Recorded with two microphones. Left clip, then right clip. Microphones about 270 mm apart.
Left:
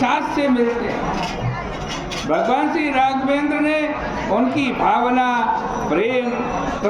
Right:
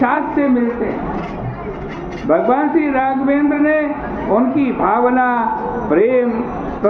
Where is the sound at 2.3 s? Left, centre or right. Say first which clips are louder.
Right 4 dB; centre.